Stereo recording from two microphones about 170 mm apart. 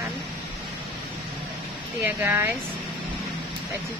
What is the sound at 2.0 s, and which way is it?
Speech, 15° right (ahead or behind).